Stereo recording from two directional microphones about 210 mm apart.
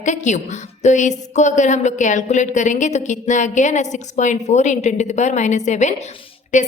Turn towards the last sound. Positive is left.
turn(degrees=35)  # may be behind; listen again after turning